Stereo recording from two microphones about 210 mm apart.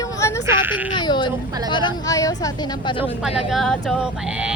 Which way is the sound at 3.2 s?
Centre (ahead or behind).